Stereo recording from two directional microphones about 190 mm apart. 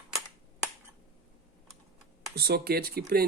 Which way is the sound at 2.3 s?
55° right (ahead or behind).